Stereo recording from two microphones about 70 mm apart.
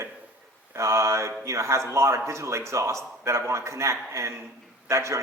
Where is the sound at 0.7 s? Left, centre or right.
Right.